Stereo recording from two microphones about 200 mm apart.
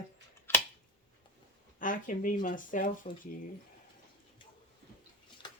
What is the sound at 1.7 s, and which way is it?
Speech, 40° left (ahead or behind).